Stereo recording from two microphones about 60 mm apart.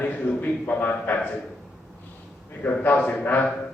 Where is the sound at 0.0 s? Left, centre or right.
Left.